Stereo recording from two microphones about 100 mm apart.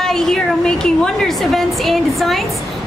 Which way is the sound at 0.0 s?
5° left (ahead or behind).